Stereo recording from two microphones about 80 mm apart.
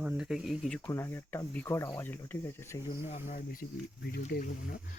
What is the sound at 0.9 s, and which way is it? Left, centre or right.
Speech, left.